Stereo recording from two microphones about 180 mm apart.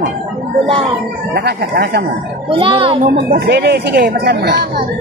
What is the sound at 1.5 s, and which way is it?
Speech, 65° right (ahead or behind).